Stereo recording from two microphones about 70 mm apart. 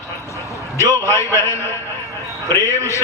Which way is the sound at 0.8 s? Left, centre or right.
Left.